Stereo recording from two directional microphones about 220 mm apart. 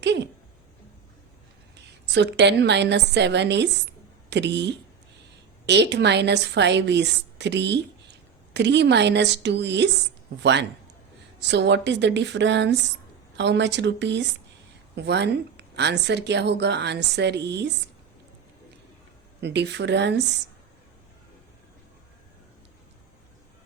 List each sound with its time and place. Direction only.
0.0 s a sound: 50° right (ahead or behind)
1.7 s a woman's voice: 50° right (ahead or behind)
19.4 s a woman's voice: 50° right (ahead or behind)